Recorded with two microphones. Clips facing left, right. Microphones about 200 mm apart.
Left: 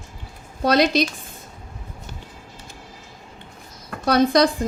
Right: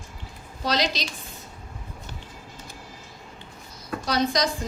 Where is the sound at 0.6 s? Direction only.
55° left (ahead or behind).